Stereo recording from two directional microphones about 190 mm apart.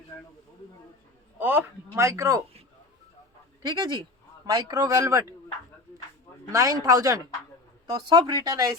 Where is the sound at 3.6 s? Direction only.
20° right (ahead or behind).